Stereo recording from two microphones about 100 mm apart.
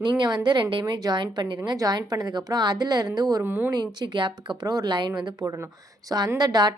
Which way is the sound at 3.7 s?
45° right (ahead or behind).